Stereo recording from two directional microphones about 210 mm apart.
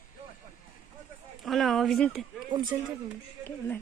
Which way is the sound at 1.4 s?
Centre (ahead or behind).